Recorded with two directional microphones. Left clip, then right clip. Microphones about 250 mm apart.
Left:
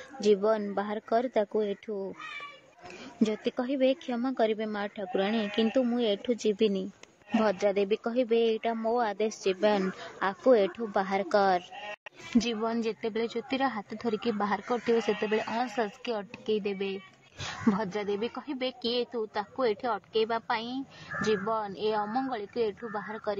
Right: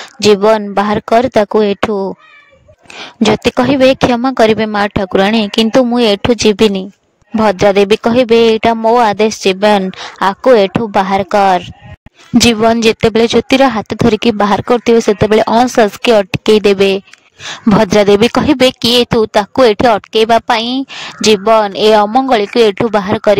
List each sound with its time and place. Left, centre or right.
0.2 s speech: right